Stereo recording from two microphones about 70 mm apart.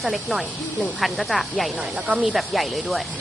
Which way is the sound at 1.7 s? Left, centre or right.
Centre.